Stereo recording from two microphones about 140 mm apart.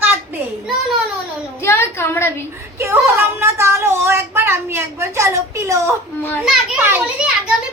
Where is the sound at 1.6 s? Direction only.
15° left (ahead or behind).